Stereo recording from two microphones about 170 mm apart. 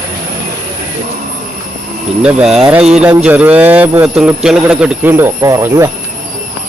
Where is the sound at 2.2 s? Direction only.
5° right (ahead or behind).